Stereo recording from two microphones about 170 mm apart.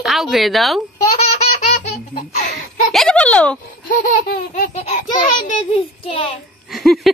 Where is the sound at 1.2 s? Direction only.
40° left (ahead or behind).